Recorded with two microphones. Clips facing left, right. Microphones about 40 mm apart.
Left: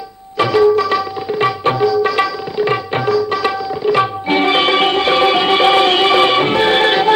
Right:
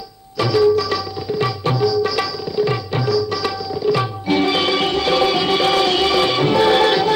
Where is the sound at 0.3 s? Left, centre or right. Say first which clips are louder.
Left 3 dB; left.